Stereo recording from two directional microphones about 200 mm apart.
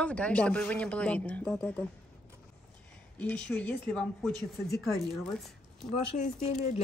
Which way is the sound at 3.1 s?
5° left (ahead or behind).